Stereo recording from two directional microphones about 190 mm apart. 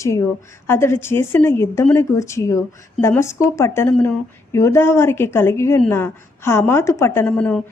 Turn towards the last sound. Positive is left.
turn(degrees=5)  # may be behind; listen again after turning